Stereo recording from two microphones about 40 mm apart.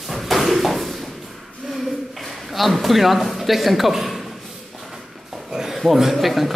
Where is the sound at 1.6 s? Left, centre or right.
Centre.